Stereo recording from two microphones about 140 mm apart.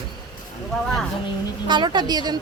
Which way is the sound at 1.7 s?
35° right (ahead or behind).